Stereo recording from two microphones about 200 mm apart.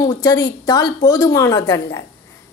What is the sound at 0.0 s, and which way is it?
A woman's voice, 20° left (ahead or behind).